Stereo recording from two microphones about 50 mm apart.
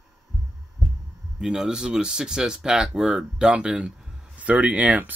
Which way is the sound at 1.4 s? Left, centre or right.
Centre.